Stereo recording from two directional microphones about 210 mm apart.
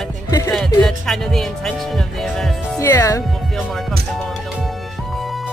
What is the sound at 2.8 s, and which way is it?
Speech, 15° left (ahead or behind).